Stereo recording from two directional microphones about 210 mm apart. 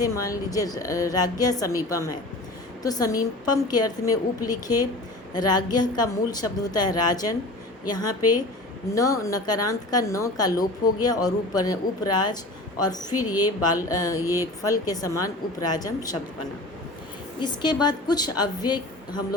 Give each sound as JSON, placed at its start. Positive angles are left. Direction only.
{"t": 0.0, "sound": "a woman's voice", "side_deg": 15}
{"t": 14.2, "sound": "speech", "side_deg": -10}
{"t": 14.6, "sound": "a woman's voice", "side_deg": 15}
{"t": 17.4, "sound": "a woman's voice", "side_deg": 20}